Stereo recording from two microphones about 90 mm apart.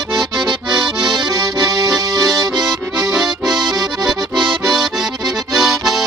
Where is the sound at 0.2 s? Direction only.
55° right (ahead or behind).